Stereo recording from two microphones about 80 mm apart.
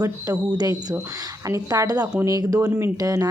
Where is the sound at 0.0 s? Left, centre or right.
Right.